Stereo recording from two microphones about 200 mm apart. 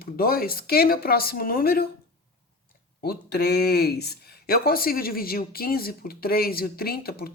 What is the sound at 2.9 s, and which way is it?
Speech, 50° left (ahead or behind).